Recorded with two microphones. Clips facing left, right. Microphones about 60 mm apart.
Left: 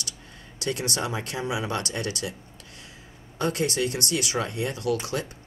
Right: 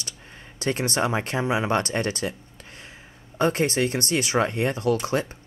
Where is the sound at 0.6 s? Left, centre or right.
Right.